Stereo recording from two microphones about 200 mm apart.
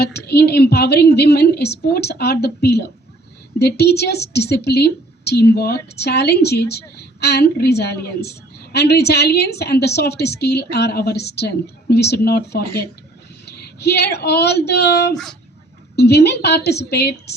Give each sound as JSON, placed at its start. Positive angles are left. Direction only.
{"t": 0.0, "sound": "a woman's voice", "side_deg": 55}
{"t": 15.1, "sound": "speech", "side_deg": 0}
{"t": 16.0, "sound": "a woman's voice", "side_deg": 55}